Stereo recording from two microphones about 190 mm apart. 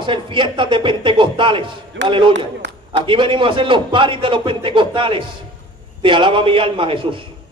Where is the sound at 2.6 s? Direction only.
75° right (ahead or behind).